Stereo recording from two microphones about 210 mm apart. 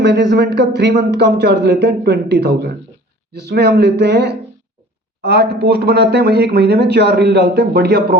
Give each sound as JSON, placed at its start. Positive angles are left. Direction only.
{"t": 0.0, "sound": "speech", "side_deg": -55}